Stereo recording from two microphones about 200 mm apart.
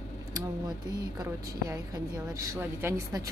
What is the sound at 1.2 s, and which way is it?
Speech, 15° right (ahead or behind).